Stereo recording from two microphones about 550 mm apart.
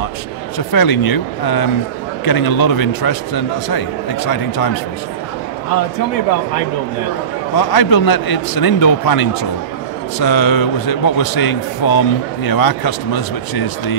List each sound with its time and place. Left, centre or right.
0.6 s a man's voice: left
7.5 s a man's voice: left